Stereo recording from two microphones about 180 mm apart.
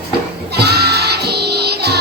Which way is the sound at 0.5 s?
65° right (ahead or behind).